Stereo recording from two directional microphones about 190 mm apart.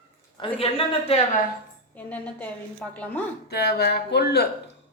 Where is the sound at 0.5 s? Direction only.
30° left (ahead or behind).